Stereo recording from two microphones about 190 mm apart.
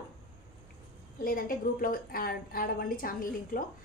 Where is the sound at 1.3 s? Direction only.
45° left (ahead or behind).